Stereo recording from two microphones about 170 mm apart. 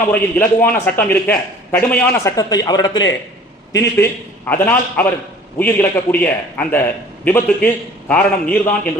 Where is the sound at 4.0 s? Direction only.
10° left (ahead or behind).